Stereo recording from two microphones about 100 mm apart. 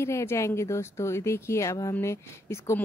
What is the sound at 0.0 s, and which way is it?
Speech, 25° left (ahead or behind).